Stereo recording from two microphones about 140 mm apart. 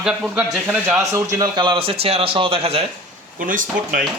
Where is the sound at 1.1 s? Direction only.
25° right (ahead or behind); by 2.8 s 45° right (ahead or behind).